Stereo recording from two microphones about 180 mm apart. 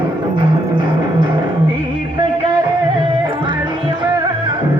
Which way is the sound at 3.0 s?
25° right (ahead or behind).